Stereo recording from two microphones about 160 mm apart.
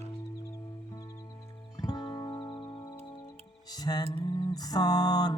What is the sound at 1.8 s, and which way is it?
Music, 25° left (ahead or behind).